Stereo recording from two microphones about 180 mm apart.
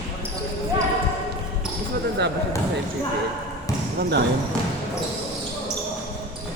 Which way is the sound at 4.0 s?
65° right (ahead or behind).